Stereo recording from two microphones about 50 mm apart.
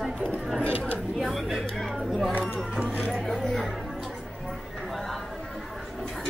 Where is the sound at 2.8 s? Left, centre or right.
Right.